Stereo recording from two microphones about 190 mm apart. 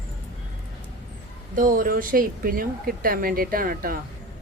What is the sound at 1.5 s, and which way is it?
Speech, 45° right (ahead or behind).